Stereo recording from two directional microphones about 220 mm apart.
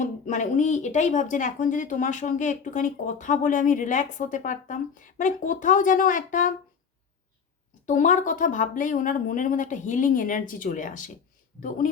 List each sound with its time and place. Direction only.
0.0 s speech: 35° left (ahead or behind)
7.9 s speech: 35° left (ahead or behind)